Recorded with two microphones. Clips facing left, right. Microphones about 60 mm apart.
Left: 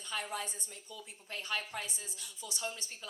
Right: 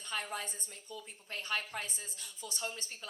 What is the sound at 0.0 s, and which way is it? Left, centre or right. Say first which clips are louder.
A woman's voice: even; right.